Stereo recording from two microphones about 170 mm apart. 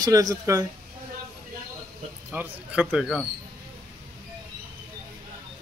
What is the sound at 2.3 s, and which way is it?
Speech, 10° right (ahead or behind).